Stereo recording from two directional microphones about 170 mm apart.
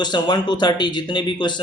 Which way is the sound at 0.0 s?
25° left (ahead or behind).